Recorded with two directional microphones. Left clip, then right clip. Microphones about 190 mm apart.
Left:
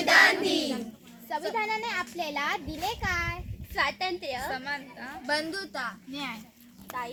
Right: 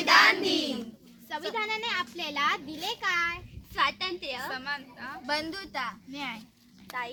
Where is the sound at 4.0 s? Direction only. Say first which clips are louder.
Left 2 dB; 40° right (ahead or behind).